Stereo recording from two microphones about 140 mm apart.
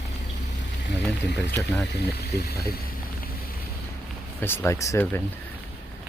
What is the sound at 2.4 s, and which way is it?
Speech, 90° left.